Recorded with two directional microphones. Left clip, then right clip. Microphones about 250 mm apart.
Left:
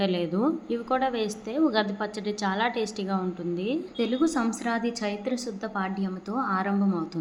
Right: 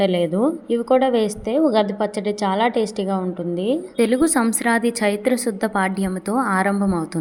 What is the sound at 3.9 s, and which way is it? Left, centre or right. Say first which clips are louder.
A woman's voice: right 8 dB; right.